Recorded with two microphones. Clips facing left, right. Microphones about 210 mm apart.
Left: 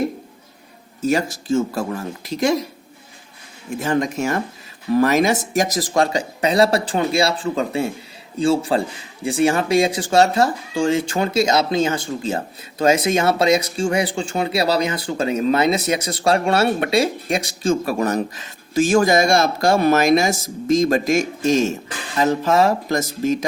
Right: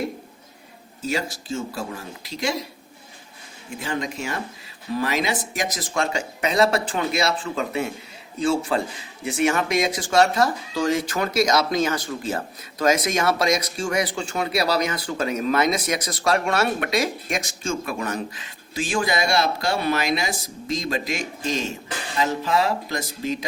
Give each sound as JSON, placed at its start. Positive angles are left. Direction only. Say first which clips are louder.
{"t": 1.0, "sound": "speech", "louder": "left 7 dB", "side_deg": 50}
{"t": 3.8, "sound": "speech", "louder": "left 8 dB", "side_deg": 45}